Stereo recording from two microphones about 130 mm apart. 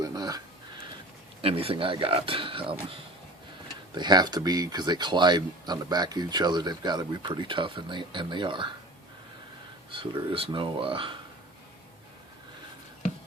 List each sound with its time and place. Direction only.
0.0 s a sound: 25° right (ahead or behind)
1.4 s speech: 45° right (ahead or behind)
9.9 s speech: 40° right (ahead or behind)